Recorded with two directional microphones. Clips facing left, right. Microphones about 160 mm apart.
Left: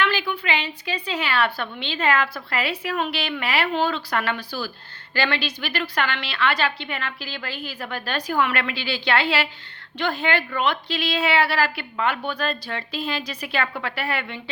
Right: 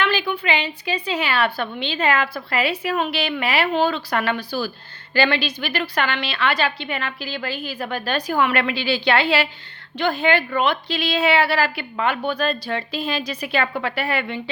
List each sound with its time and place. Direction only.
0.0 s a woman's voice: 20° right (ahead or behind)